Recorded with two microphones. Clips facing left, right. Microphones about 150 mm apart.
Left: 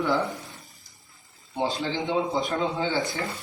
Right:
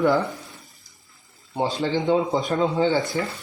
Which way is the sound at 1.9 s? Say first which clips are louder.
Right 7 dB; 50° right (ahead or behind).